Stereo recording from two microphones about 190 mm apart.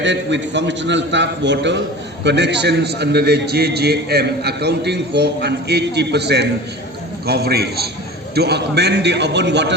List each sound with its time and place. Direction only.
0.0 s a man's voice: 70° right (ahead or behind)